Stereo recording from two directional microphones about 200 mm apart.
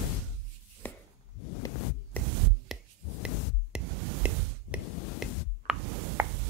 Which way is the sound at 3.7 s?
5° right (ahead or behind).